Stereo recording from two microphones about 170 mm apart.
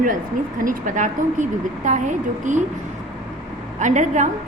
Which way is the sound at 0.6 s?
50° right (ahead or behind).